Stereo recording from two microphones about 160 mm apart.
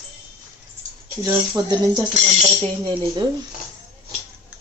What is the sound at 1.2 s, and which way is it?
Speech, 25° right (ahead or behind).